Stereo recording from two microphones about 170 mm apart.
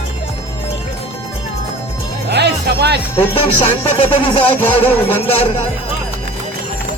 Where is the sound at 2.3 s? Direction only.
80° right.